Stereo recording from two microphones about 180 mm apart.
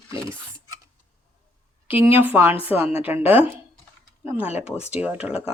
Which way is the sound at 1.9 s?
10° right (ahead or behind).